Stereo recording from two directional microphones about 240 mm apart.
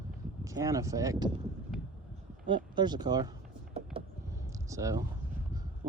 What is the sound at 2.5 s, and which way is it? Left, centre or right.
Speech, centre.